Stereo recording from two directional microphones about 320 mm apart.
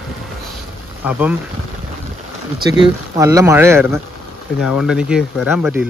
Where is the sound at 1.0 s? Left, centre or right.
Centre.